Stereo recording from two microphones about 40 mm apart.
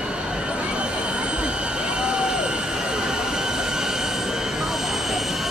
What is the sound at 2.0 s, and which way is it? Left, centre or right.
Vehicle, centre.